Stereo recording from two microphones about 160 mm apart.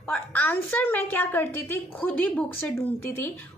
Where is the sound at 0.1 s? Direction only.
10° left (ahead or behind).